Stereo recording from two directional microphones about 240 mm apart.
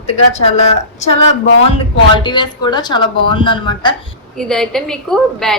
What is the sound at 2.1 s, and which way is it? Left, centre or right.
A woman's voice, centre.